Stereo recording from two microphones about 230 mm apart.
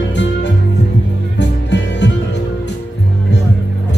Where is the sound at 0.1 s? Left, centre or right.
Left.